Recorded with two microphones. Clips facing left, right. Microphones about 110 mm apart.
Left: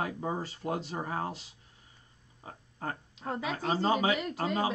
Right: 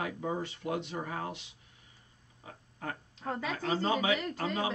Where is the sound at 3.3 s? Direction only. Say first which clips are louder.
Left 1 dB; 15° left (ahead or behind).